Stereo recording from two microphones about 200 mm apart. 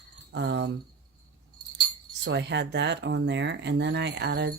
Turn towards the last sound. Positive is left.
turn(degrees=-60)  # may be behind; listen again after turning